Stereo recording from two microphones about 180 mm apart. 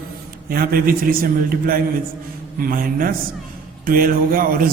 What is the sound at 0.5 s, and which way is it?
A man's voice, 55° right (ahead or behind).